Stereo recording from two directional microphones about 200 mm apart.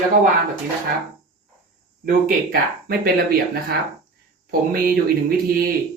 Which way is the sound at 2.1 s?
45° right (ahead or behind).